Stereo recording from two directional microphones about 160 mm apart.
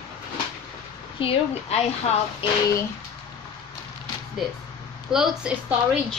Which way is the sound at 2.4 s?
35° left (ahead or behind).